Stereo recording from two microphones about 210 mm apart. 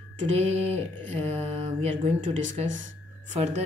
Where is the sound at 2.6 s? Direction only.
60° right (ahead or behind).